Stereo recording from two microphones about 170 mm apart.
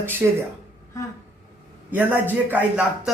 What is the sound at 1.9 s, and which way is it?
A man's voice, 10° right (ahead or behind).